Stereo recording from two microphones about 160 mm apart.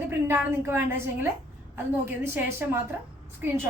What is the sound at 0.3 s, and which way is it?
A woman's voice, 15° right (ahead or behind).